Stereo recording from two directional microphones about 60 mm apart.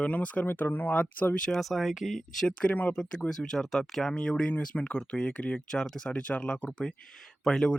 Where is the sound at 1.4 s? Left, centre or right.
Centre.